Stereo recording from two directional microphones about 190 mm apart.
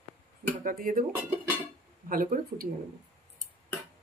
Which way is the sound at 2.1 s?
45° right (ahead or behind).